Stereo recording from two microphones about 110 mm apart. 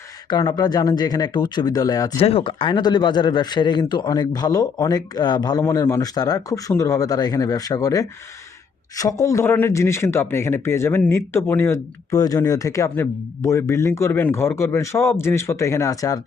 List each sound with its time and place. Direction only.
0.3 s a man's voice: 35° left (ahead or behind)
2.2 s a man's voice: 55° left (ahead or behind); by 5.6 s 40° left (ahead or behind)
5.6 s a man's voice: 25° left (ahead or behind)